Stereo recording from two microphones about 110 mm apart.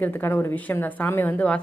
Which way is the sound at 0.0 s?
15° left (ahead or behind).